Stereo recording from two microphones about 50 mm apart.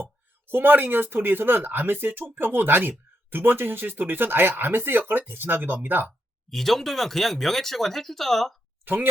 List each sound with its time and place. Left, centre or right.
0.4 s speech: right
6.5 s speech: centre
8.8 s a woman's voice: right